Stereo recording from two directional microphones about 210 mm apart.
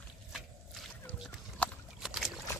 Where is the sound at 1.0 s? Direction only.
5° left (ahead or behind).